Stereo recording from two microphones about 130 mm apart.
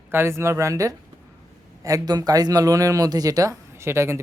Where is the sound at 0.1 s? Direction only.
20° right (ahead or behind).